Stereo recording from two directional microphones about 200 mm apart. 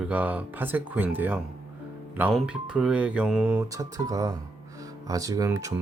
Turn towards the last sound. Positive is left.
turn(degrees=-15)  # may be behind; listen again after turning